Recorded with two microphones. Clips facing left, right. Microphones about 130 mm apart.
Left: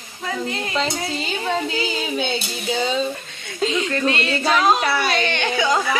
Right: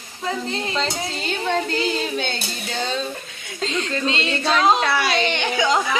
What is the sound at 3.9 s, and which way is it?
Music, 20° right (ahead or behind).